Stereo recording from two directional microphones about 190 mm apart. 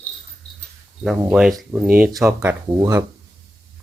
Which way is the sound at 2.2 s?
15° right (ahead or behind).